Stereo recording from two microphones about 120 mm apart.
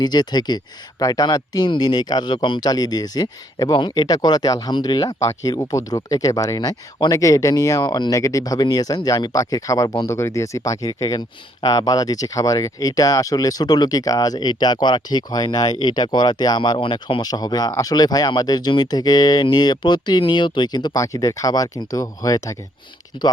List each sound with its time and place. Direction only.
0.0 s speech: 35° left (ahead or behind)
7.8 s speech: 40° left (ahead or behind)
10.1 s speech: 25° left (ahead or behind)